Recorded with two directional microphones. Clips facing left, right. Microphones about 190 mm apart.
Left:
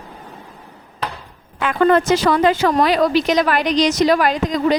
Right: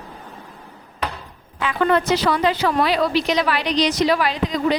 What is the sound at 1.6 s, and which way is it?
A woman's voice, 50° left (ahead or behind).